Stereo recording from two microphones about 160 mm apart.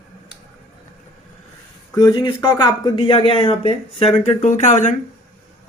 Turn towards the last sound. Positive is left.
turn(degrees=50)  # may be behind; listen again after turning